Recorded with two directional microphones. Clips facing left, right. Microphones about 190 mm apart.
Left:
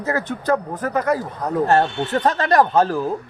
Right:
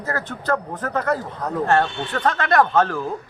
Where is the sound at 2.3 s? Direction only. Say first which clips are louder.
Left 1 dB; 35° left (ahead or behind).